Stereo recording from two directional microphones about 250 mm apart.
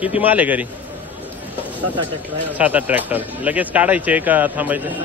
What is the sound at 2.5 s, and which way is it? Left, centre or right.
Speech, centre.